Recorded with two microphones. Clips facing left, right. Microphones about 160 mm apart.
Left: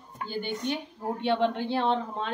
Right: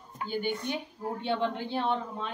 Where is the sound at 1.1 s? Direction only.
70° left (ahead or behind).